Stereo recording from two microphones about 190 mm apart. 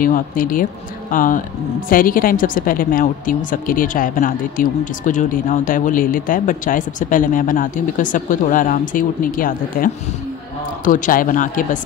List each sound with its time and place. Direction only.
0.0 s a woman's voice: 45° left (ahead or behind)
10.9 s a woman's voice: 45° left (ahead or behind)